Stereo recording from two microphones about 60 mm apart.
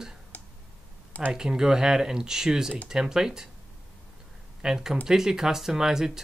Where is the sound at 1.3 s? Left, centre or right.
Centre.